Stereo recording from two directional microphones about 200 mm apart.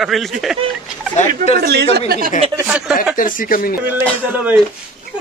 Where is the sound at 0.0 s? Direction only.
Centre (ahead or behind).